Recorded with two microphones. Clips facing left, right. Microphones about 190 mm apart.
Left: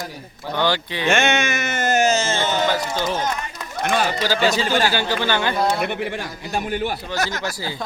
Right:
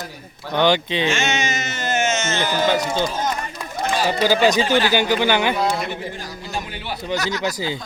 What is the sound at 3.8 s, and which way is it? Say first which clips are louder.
Speech: left 1 dB; 60° left (ahead or behind).